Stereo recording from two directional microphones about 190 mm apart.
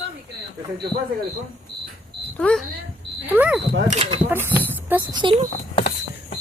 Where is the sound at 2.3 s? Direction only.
5° left (ahead or behind).